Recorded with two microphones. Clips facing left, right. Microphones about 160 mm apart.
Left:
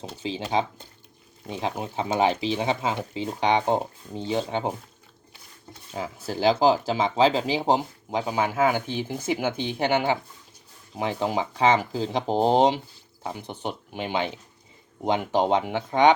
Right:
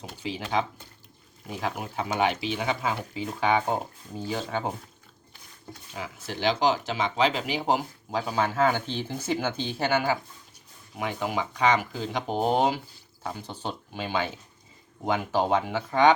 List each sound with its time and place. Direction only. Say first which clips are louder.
0.2 s speech: left 2 dB; 25° left (ahead or behind)
5.9 s speech: left 5 dB; 40° left (ahead or behind); by 16.1 s 20° left (ahead or behind)